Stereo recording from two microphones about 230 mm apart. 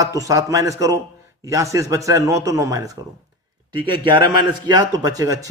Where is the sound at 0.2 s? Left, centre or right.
Centre.